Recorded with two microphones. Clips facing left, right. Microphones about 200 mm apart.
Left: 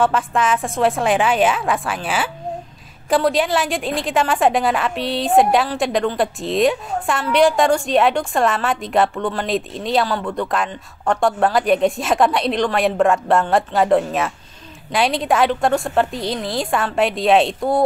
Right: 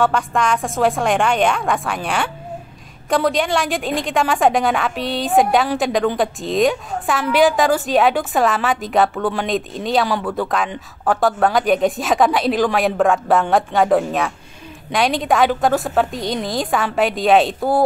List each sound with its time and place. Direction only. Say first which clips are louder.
0.0 s speech: even; centre (ahead or behind)